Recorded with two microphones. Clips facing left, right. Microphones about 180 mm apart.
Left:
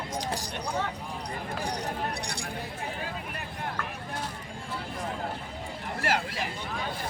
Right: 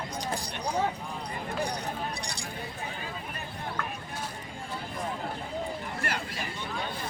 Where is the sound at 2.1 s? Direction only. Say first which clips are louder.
Left 2 dB; 60° left (ahead or behind).